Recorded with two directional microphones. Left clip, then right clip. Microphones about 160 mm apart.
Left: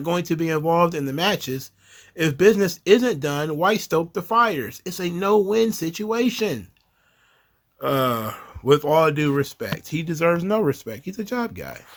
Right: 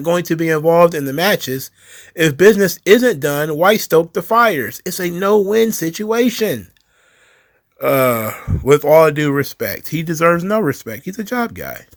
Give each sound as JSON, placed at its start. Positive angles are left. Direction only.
{"t": 0.0, "sound": "speech", "side_deg": -25}
{"t": 7.8, "sound": "speech", "side_deg": -30}